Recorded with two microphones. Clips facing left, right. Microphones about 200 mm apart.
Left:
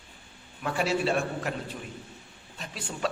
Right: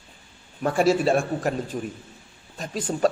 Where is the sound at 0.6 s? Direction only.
45° right (ahead or behind).